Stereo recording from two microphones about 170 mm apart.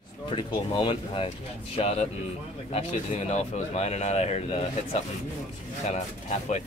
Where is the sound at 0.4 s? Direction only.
30° left (ahead or behind).